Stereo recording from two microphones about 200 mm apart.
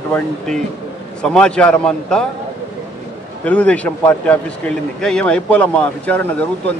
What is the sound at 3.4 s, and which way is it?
A man's voice, 5° left (ahead or behind).